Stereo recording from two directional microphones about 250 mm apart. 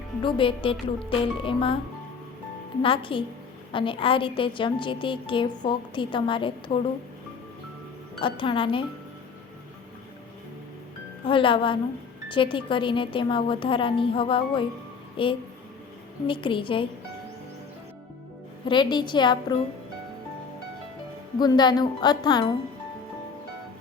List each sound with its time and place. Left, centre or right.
0.2 s a woman's voice: centre
2.8 s a woman's voice: left
8.2 s a woman's voice: left
11.3 s a woman's voice: centre
18.6 s a woman's voice: centre
21.3 s a woman's voice: centre